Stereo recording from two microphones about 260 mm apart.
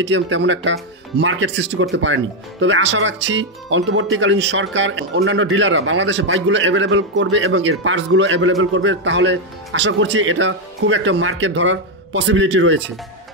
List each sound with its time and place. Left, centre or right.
0.0 s speech: right